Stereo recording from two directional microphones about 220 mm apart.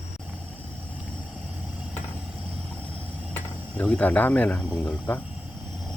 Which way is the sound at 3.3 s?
5° left (ahead or behind).